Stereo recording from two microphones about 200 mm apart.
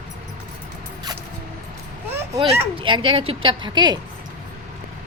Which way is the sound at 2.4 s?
25° right (ahead or behind).